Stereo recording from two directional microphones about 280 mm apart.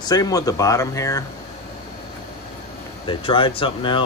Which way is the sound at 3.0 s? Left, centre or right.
Centre.